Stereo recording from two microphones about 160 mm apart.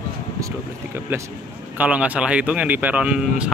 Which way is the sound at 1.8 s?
10° right (ahead or behind).